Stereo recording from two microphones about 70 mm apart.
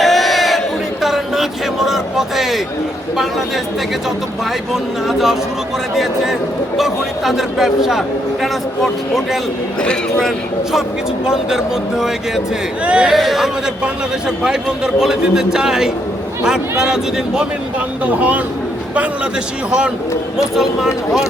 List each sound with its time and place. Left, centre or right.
0.0 s crowd: centre
1.0 s a sound: centre
4.7 s a man's voice: centre
6.7 s a man's voice: centre
9.8 s a man's voice: centre
11.3 s speech: centre
13.1 s a man's voice: centre
18.0 s speech: right
20.6 s a man's voice: centre